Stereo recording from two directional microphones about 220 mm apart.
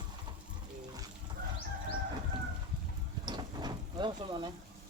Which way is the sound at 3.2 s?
20° right (ahead or behind).